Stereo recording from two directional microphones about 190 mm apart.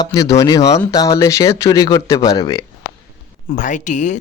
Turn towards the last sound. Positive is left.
turn(degrees=40)  # may be behind; listen again after turning